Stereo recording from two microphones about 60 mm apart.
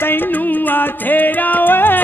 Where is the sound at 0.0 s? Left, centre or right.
Left.